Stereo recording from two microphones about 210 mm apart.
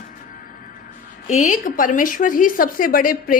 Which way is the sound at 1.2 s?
35° left (ahead or behind).